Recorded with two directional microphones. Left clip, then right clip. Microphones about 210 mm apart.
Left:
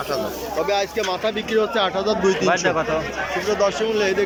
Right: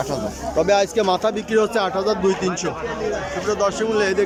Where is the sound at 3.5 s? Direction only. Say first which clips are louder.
Right 1 dB; centre (ahead or behind).